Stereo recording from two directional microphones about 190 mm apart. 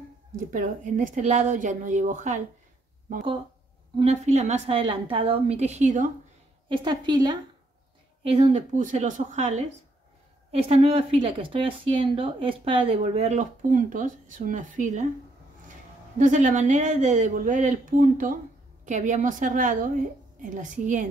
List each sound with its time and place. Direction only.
0.5 s speech: 45° right (ahead or behind)
4.0 s speech: 35° right (ahead or behind)
6.7 s a woman's voice: 25° right (ahead or behind)
8.2 s speech: 35° right (ahead or behind)
16.2 s a woman's voice: 40° right (ahead or behind)